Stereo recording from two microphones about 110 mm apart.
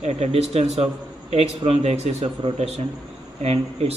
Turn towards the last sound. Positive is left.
turn(degrees=-70)  # may be behind; listen again after turning